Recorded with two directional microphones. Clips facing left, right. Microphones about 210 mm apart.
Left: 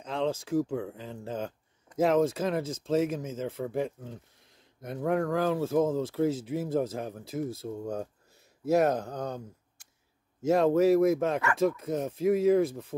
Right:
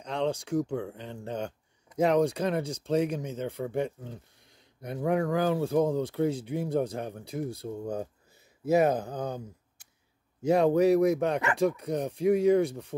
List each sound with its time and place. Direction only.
0.0 s speech: centre (ahead or behind)